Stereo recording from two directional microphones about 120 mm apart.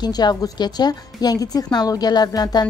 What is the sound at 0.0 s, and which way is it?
Speech, 35° left (ahead or behind).